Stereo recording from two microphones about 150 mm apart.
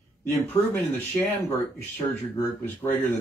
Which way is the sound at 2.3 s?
15° left (ahead or behind).